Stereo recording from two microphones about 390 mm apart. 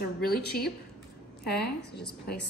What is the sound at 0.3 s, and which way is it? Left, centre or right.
A woman's voice, left.